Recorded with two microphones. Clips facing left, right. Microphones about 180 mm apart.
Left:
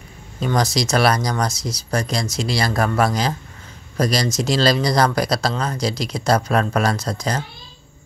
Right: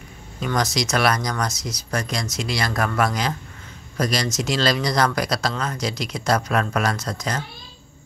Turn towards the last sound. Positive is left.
turn(degrees=30)  # may be behind; listen again after turning